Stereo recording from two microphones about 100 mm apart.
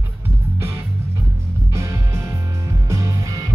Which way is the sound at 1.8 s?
30° right (ahead or behind).